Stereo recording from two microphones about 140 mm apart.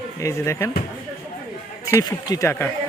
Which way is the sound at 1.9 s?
25° left (ahead or behind).